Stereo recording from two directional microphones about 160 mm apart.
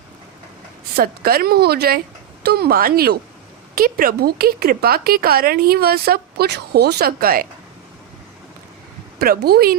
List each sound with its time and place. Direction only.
0.9 s speech: 70° right (ahead or behind)
9.1 s speech: 75° right (ahead or behind)